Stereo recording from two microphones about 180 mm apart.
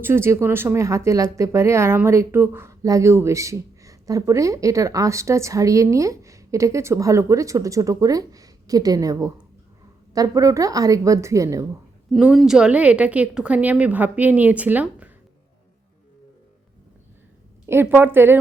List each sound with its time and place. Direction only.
0.0 s speech: 15° right (ahead or behind)
12.1 s speech: centre (ahead or behind)
17.7 s speech: 10° right (ahead or behind)